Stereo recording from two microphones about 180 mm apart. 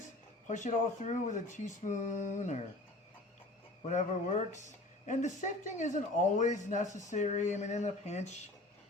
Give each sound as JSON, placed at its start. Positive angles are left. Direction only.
{"t": 0.4, "sound": "speech", "side_deg": 45}
{"t": 3.8, "sound": "speech", "side_deg": 40}